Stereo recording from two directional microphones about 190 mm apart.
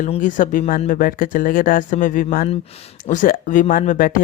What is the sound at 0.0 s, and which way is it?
Speech, 45° left (ahead or behind).